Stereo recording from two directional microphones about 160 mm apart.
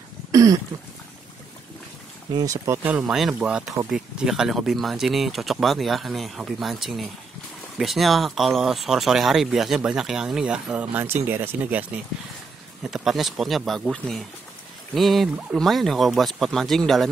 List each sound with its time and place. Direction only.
0.3 s a sound: 20° right (ahead or behind)
2.3 s speech: 20° right (ahead or behind)
12.9 s speech: centre (ahead or behind)